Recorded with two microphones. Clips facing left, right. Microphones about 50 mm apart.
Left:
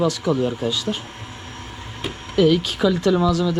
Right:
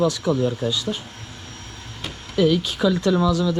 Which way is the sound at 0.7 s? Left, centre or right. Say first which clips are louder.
Left 1 dB; left.